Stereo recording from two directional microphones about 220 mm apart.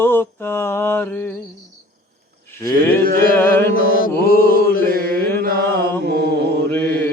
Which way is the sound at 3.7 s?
40° left (ahead or behind).